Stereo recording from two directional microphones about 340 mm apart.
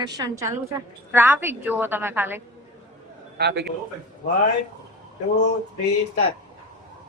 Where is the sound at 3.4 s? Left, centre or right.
Right.